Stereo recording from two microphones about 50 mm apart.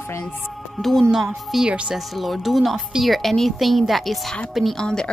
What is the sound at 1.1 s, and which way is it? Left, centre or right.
Speech, centre.